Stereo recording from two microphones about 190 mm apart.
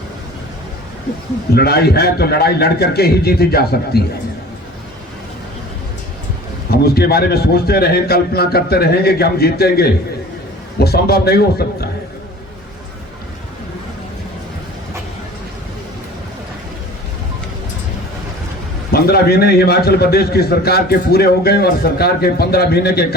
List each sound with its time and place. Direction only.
1.5 s a man's voice: 55° left (ahead or behind)
6.7 s a man's voice: 55° left (ahead or behind)
18.9 s a man's voice: 55° left (ahead or behind)